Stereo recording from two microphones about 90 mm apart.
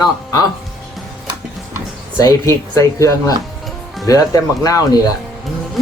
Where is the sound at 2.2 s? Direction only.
35° left (ahead or behind).